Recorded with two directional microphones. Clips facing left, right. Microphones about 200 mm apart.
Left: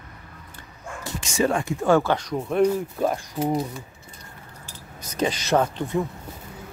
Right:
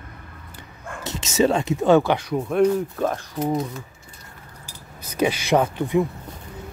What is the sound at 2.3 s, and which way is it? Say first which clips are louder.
Speech: right 2 dB; centre (ahead or behind).